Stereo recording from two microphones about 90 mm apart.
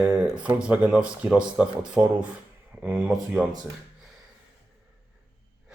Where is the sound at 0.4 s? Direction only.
15° right (ahead or behind).